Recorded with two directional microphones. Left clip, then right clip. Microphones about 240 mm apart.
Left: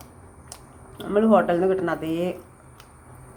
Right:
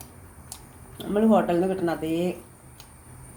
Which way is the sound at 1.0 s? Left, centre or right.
Centre.